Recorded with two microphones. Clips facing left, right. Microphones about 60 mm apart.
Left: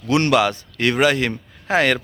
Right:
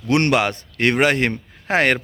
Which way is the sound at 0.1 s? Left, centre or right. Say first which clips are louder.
Left 1 dB; right.